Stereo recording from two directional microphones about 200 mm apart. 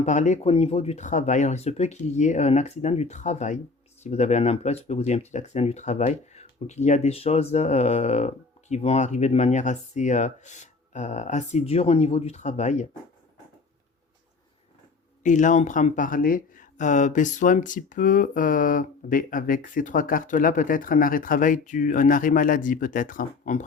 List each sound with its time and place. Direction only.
0.0 s speech: 35° left (ahead or behind)
15.2 s speech: 40° left (ahead or behind)